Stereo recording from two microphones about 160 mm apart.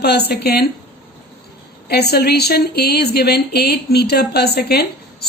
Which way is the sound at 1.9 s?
85° left.